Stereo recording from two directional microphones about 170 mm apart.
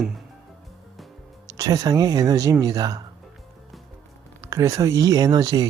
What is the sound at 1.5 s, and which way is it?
Speech, 20° right (ahead or behind).